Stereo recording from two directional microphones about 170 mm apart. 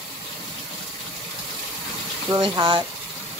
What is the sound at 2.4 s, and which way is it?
Speech, 30° right (ahead or behind).